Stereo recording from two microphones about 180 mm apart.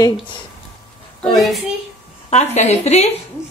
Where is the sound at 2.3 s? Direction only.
40° left (ahead or behind).